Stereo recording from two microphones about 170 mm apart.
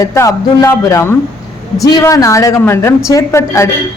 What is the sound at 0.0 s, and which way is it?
A woman's voice, 20° left (ahead or behind).